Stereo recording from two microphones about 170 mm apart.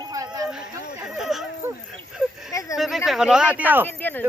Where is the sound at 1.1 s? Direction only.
Centre (ahead or behind).